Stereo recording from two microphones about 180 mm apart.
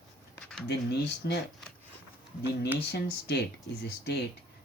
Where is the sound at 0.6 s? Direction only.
70° left (ahead or behind).